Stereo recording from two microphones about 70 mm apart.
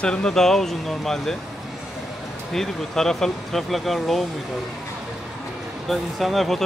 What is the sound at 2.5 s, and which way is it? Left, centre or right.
Speech, centre.